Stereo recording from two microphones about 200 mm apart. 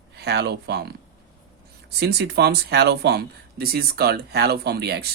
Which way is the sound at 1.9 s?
55° right (ahead or behind).